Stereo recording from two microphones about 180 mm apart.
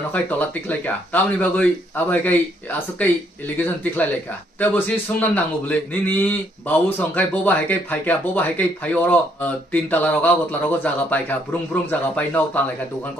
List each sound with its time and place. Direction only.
0.1 s a man's voice: 10° left (ahead or behind)